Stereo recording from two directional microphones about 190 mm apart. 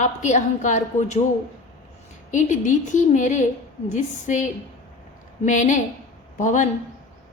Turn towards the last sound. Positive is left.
turn(degrees=40)  # may be behind; listen again after turning